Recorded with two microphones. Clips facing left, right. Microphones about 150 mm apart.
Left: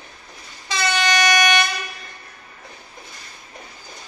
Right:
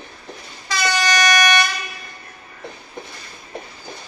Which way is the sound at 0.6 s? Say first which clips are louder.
Right 1 dB; 25° left (ahead or behind).